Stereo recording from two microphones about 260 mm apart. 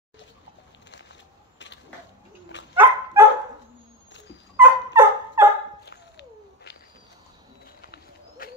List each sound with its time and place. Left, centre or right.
2.7 s dog: centre
4.6 s dog: centre
5.9 s a sound: left
7.8 s bird: left